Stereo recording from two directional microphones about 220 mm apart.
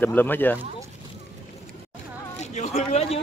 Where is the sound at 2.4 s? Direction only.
30° left (ahead or behind).